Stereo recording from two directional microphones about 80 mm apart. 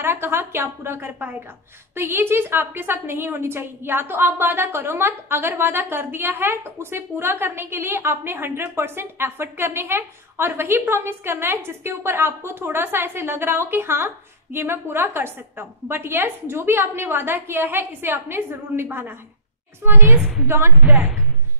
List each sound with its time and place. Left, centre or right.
0.0 s a woman's voice: right